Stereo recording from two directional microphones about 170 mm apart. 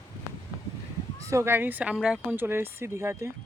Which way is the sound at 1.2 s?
15° right (ahead or behind).